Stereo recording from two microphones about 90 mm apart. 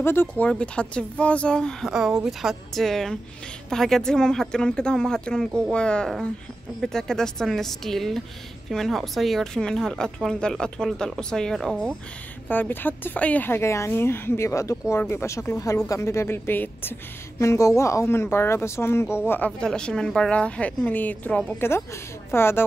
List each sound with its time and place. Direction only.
0.0 s speech: 25° left (ahead or behind)
0.5 s a woman's voice: 10° left (ahead or behind)
1.9 s a woman's voice: 5° right (ahead or behind)
12.4 s speech: 20° left (ahead or behind)
17.4 s speech: 35° left (ahead or behind)
19.6 s a woman's voice: 10° left (ahead or behind); by 22.7 s 25° left (ahead or behind)